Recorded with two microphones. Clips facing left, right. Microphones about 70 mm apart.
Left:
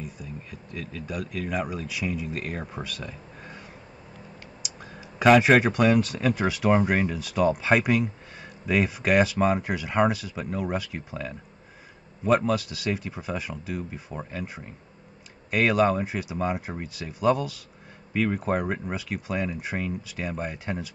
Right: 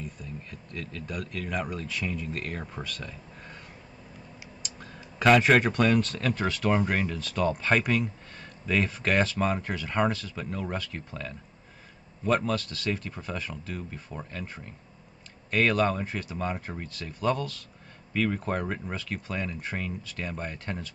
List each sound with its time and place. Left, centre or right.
0.0 s speech: centre
4.6 s speech: centre